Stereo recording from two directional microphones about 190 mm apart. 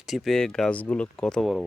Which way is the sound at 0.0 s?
Centre (ahead or behind).